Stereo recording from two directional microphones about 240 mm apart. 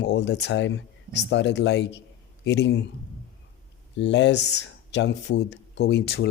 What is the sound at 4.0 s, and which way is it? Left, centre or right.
Speech, left.